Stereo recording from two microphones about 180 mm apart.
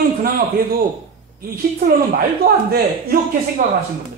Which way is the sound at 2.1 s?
60° right (ahead or behind).